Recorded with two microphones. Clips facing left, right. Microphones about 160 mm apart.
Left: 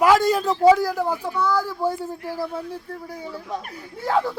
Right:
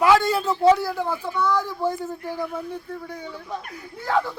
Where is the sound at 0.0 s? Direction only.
40° left (ahead or behind).